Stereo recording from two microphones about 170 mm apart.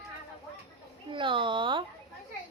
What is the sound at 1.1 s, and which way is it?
Speech, 30° right (ahead or behind).